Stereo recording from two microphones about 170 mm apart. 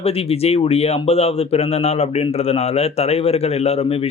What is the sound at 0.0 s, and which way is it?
Speech, 35° left (ahead or behind).